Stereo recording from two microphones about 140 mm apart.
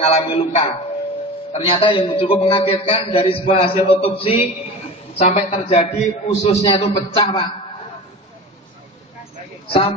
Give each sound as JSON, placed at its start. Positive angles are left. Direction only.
{"t": 0.0, "sound": "a man's voice", "side_deg": 45}
{"t": 6.9, "sound": "a man's voice", "side_deg": 30}
{"t": 9.7, "sound": "a man's voice", "side_deg": 45}